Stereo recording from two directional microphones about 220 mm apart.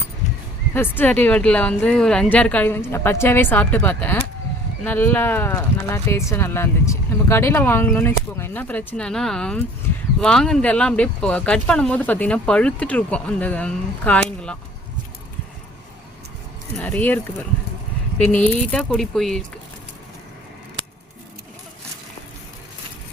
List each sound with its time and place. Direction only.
0.7 s speech: 10° left (ahead or behind)
16.7 s speech: 5° left (ahead or behind)
18.4 s speech: 5° left (ahead or behind)